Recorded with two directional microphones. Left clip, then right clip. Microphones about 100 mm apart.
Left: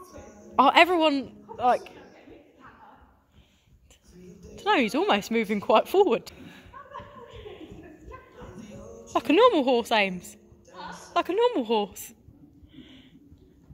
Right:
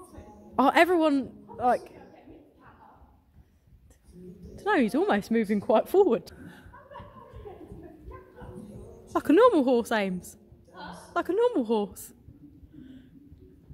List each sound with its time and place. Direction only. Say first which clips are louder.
0.6 s speech: left 3 dB; 60° right (ahead or behind)
1.6 s speech: left 2 dB; 40° right (ahead or behind)
4.6 s speech: left 2 dB; 45° right (ahead or behind)
9.1 s a woman's voice: even; 50° right (ahead or behind)
11.1 s speech: left 2 dB; 40° right (ahead or behind)